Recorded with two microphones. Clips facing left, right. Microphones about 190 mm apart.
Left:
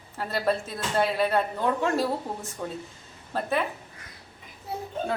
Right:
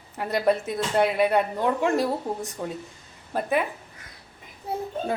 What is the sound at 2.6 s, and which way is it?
A woman's voice, 15° right (ahead or behind).